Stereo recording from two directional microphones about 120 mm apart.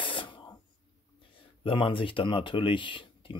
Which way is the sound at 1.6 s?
45° left (ahead or behind).